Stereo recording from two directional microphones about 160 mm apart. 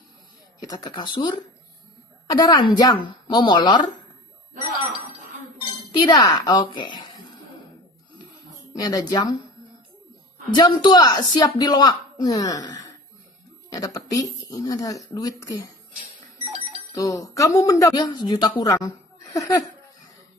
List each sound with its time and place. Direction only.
0.6 s a woman's voice: 25° left (ahead or behind)
6.0 s a woman's voice: 25° left (ahead or behind)
8.7 s a woman's voice: 25° left (ahead or behind)
10.5 s a woman's voice: 25° left (ahead or behind)
13.7 s a sound: 25° left (ahead or behind)
14.5 s a woman's voice: 25° left (ahead or behind)
16.9 s a woman's voice: 20° left (ahead or behind)